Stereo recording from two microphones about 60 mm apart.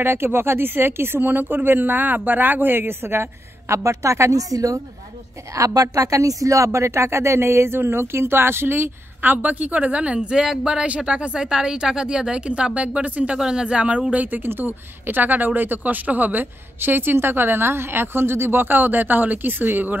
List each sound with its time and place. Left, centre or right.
0.0 s speech: right
5.5 s speech: right
13.4 s speech: centre; by 20.0 s right